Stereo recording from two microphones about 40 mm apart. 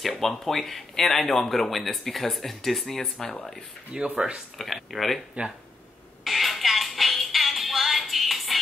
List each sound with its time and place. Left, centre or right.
0.0 s speech: centre
3.9 s speech: right
4.6 s speech: centre
6.2 s music: centre